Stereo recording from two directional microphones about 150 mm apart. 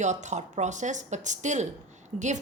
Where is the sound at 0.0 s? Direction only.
55° right (ahead or behind).